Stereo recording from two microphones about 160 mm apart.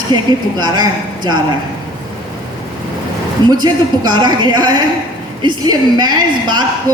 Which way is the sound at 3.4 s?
25° right (ahead or behind).